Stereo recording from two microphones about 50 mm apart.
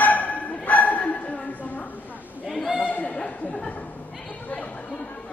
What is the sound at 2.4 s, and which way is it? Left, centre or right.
Chatter, centre.